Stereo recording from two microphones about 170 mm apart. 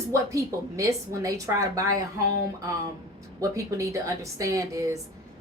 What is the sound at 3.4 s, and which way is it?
A man's voice, 20° right (ahead or behind).